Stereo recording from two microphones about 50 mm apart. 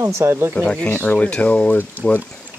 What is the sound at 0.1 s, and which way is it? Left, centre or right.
Speech, right.